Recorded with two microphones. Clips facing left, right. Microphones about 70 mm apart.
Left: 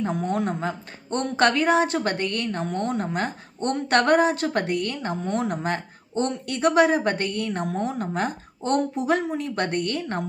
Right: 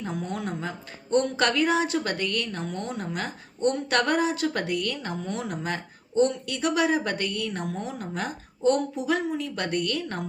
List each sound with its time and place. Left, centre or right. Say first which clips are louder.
0.0 s speech: left 6 dB; left